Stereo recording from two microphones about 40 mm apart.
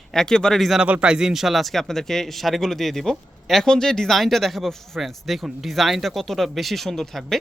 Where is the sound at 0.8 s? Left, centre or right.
Right.